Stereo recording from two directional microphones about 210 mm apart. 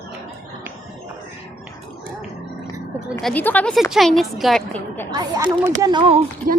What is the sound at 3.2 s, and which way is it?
A woman's voice, 10° left (ahead or behind).